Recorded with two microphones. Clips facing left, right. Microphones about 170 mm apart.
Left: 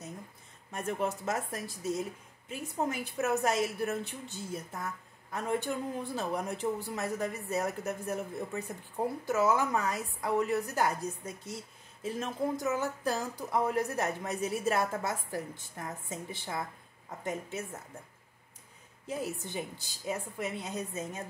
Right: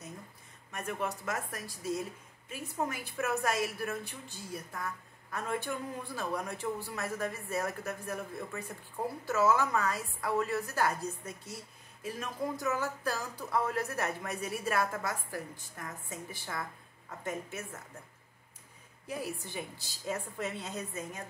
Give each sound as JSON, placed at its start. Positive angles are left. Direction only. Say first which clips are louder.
{"t": 0.7, "sound": "a woman's voice", "louder": "left 3 dB", "side_deg": 25}
{"t": 19.0, "sound": "a woman's voice", "louder": "left 2 dB", "side_deg": 20}
{"t": 20.1, "sound": "a woman's voice", "louder": "left 1 dB", "side_deg": 10}